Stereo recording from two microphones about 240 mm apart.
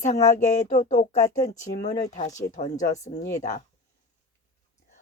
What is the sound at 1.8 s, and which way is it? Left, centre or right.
Speech, centre.